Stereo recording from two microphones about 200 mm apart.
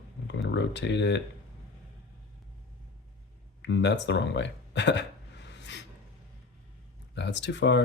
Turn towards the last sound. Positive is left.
turn(degrees=65)  # may be behind; listen again after turning